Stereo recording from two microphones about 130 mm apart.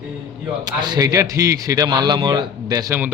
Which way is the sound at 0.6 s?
30° right (ahead or behind).